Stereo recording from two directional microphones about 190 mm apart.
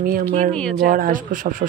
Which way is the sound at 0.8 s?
45° right (ahead or behind).